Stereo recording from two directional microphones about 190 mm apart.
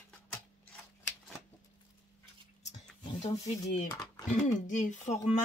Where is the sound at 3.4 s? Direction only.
40° left (ahead or behind).